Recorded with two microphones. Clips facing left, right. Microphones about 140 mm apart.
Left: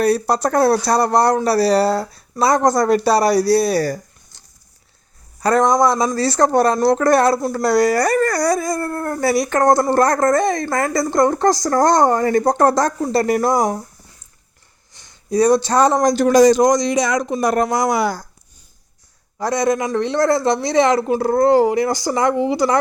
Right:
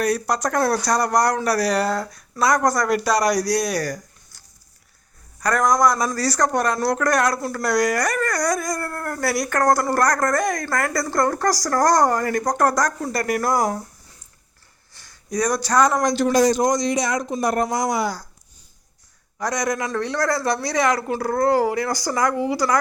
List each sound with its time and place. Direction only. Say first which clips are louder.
0.0 s speech: left 5 dB; 30° left (ahead or behind)
14.9 s speech: left 7 dB; 20° left (ahead or behind); by 16.2 s 40° left (ahead or behind)
16.2 s a man's voice: left 7 dB; 90° left; by 18.2 s 70° left (ahead or behind)
19.4 s speech: left 6 dB; 30° left (ahead or behind)